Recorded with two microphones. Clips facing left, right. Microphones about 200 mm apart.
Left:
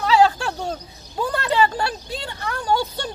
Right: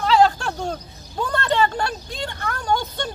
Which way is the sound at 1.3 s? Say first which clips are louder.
Even; 5° left (ahead or behind).